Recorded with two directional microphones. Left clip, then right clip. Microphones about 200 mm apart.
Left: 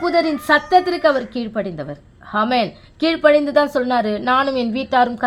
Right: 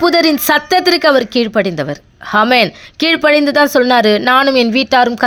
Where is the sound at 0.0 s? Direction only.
35° right (ahead or behind).